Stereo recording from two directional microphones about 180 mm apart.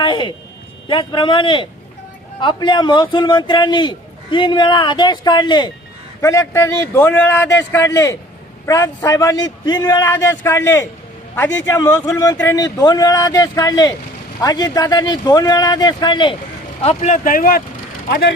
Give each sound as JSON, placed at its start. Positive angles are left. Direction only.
{"t": 0.0, "sound": "a man's voice", "side_deg": 25}
{"t": 16.8, "sound": "speech", "side_deg": 35}